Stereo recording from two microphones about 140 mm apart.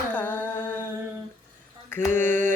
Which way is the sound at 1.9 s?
15° left (ahead or behind).